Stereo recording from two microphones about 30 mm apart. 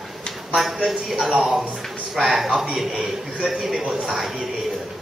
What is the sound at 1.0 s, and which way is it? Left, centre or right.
Speech, centre.